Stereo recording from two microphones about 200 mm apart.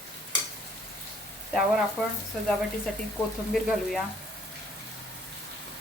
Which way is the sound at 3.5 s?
Centre (ahead or behind).